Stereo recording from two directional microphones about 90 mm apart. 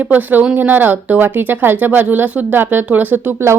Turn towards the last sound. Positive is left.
turn(degrees=-20)  # may be behind; listen again after turning